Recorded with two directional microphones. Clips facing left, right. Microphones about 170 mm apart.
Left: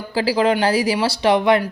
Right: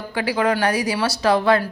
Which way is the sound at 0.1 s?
30° left (ahead or behind).